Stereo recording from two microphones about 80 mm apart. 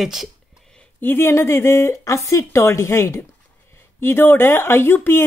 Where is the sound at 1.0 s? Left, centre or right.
Left.